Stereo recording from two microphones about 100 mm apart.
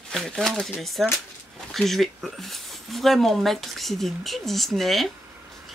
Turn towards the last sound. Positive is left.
turn(degrees=0)  # may be behind; listen again after turning